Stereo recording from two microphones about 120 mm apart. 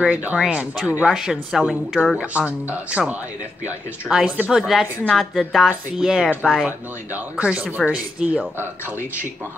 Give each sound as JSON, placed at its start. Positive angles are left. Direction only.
{"t": 0.0, "sound": "speech", "side_deg": -10}
{"t": 6.6, "sound": "speech", "side_deg": -10}
{"t": 8.8, "sound": "speech", "side_deg": 20}